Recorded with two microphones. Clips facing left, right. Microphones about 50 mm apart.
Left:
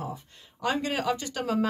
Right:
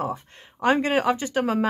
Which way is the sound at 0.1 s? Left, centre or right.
Right.